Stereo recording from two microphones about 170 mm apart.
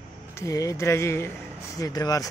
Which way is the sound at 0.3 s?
15° left (ahead or behind).